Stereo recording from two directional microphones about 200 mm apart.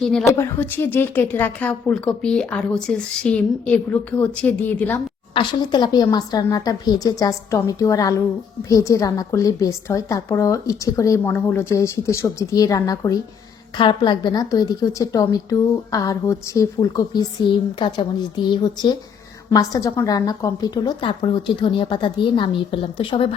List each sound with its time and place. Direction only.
0.0 s a woman's voice: 5° left (ahead or behind)
5.3 s a woman's voice: 20° left (ahead or behind)